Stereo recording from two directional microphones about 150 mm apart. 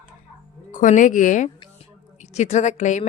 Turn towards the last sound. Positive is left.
turn(degrees=50)  # may be behind; listen again after turning